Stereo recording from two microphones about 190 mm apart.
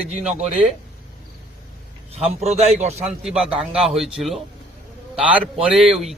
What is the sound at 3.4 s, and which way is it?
A man's voice, centre (ahead or behind).